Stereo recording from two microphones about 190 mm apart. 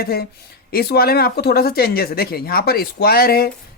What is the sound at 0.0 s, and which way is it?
Speech, 55° left (ahead or behind).